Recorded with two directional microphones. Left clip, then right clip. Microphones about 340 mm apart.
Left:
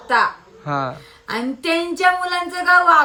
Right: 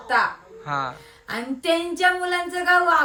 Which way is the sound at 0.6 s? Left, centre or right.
Centre.